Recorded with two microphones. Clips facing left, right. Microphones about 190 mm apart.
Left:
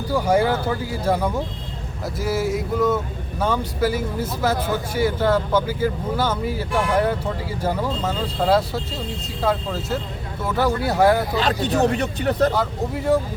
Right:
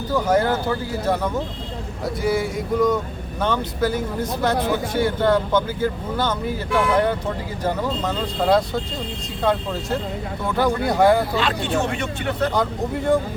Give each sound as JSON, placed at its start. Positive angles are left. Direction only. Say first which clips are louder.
{"t": 0.1, "sound": "speech", "louder": "even", "side_deg": 10}
{"t": 11.3, "sound": "speech", "louder": "left 2 dB", "side_deg": 40}
{"t": 12.5, "sound": "speech", "louder": "right 1 dB", "side_deg": 5}